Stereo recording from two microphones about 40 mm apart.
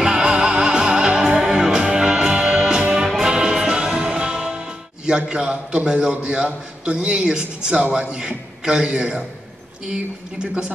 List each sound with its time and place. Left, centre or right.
0.0 s music: right
5.8 s a man's voice: right
7.8 s a man's voice: right
8.1 s a man's voice: right